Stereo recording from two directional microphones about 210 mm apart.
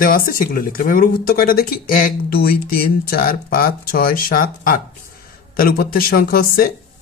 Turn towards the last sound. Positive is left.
turn(degrees=45)  # may be behind; listen again after turning